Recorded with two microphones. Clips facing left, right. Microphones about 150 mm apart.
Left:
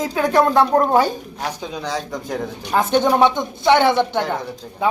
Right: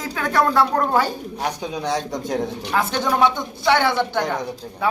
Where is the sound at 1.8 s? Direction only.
25° right (ahead or behind).